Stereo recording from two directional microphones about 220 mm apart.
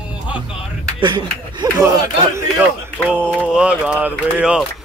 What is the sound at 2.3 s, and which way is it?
Speech, 5° right (ahead or behind).